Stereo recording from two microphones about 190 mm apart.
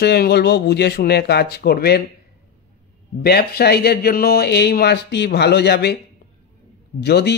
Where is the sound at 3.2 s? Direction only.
55° left (ahead or behind).